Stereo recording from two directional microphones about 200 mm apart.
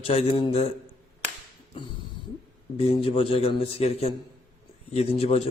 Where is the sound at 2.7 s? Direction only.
30° left (ahead or behind).